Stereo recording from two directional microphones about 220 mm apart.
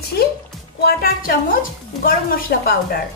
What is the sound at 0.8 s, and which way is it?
Speech, 40° left (ahead or behind).